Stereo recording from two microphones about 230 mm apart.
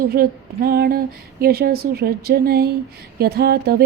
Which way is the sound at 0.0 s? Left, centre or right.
Right.